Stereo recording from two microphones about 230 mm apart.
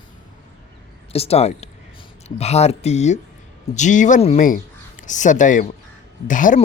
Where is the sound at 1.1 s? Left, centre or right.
Left.